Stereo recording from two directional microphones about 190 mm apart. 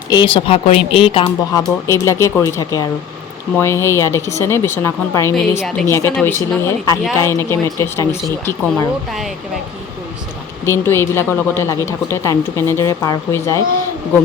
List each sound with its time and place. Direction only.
0.3 s a woman's voice: 30° left (ahead or behind); by 8.9 s 15° left (ahead or behind)
10.7 s a woman's voice: 10° left (ahead or behind)